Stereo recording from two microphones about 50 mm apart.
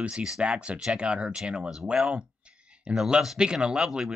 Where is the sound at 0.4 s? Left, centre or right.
Right.